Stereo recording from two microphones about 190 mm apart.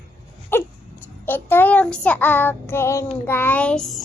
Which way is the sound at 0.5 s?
10° left (ahead or behind).